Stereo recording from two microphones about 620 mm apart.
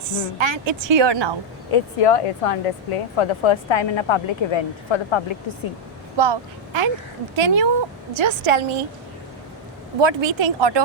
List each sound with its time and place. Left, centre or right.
0.1 s a woman's voice: right
1.7 s speech: left
6.1 s a woman's voice: right
10.0 s a woman's voice: right